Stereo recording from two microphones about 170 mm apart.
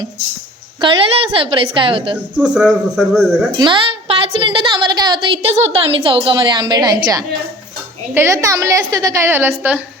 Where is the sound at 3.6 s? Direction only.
30° right (ahead or behind); by 9.8 s 10° right (ahead or behind).